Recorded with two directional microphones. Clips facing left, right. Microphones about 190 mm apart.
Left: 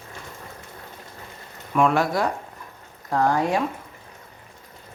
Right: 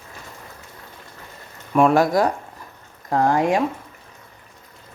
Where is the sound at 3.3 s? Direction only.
15° right (ahead or behind).